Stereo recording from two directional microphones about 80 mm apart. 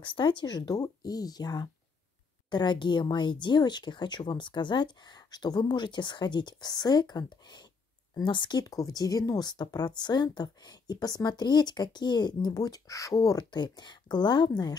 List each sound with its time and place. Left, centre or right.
0.0 s speech: left
0.6 s speech: left
2.5 s speech: left
8.6 s speech: left
13.5 s speech: left